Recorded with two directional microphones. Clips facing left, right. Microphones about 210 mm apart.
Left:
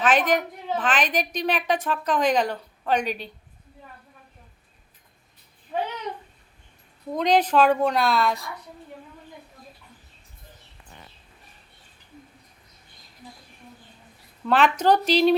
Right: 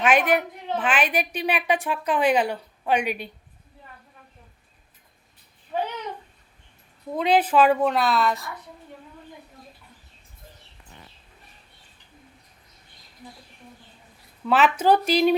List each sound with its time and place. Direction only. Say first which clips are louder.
0.0 s a woman's voice: right 1 dB; 10° right (ahead or behind)
7.1 s a woman's voice: even; 5° right (ahead or behind)
14.4 s a woman's voice: even; 5° right (ahead or behind)